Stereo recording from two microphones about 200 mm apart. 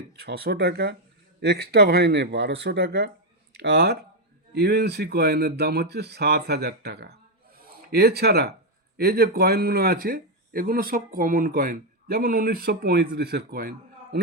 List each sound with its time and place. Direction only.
0.2 s speech: 50° right (ahead or behind)